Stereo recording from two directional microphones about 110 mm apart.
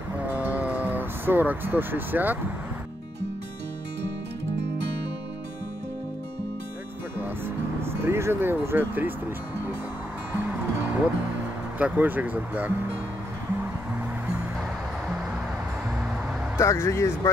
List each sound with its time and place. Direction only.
0.3 s music: 15° right (ahead or behind)
7.8 s speech: 20° right (ahead or behind)
10.3 s music: 15° right (ahead or behind)
11.8 s speech: 15° right (ahead or behind)
16.5 s speech: 25° left (ahead or behind)